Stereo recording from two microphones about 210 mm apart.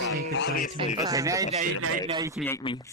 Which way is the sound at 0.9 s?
15° right (ahead or behind).